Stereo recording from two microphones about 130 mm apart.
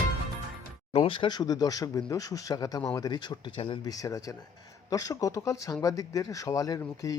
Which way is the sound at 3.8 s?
25° left (ahead or behind).